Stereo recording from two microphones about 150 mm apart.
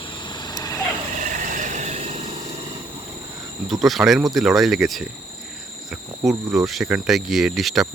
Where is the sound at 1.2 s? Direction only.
55° right (ahead or behind).